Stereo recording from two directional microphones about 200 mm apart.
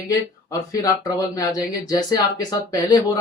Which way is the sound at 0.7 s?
15° left (ahead or behind).